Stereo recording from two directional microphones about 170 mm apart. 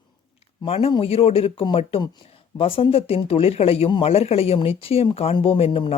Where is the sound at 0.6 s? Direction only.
35° left (ahead or behind).